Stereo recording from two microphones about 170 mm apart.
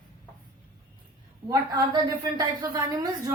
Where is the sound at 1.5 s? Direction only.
20° right (ahead or behind).